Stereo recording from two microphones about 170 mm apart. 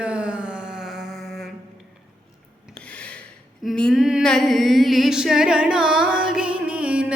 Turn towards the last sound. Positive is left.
turn(degrees=-5)  # may be behind; listen again after turning